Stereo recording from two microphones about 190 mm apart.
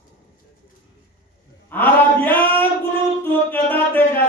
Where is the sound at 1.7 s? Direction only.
10° left (ahead or behind).